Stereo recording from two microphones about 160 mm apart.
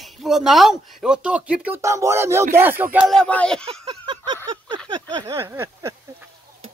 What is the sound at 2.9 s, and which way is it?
Speech, centre (ahead or behind).